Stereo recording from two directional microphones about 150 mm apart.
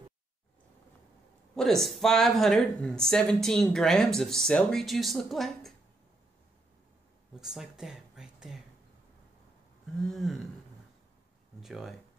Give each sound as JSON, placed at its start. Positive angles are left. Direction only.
{"t": 1.5, "sound": "speech", "side_deg": 0}
{"t": 7.3, "sound": "speech", "side_deg": 0}
{"t": 10.0, "sound": "speech", "side_deg": 0}
{"t": 11.6, "sound": "speech", "side_deg": 0}